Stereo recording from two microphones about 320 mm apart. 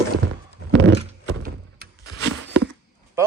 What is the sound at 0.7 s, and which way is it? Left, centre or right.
Thunk, right.